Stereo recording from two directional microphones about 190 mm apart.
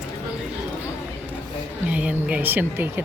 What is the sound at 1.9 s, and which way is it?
Speech, 10° right (ahead or behind).